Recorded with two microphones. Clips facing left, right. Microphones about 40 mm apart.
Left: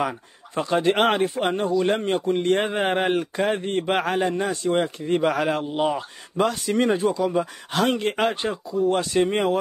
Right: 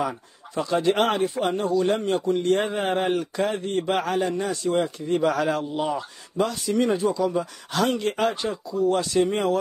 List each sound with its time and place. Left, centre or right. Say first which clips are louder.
0.6 s a man's voice: left 1 dB; left
6.3 s a man's voice: left 2 dB; left